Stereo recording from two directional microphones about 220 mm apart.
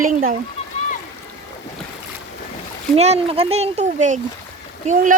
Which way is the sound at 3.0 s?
30° right (ahead or behind).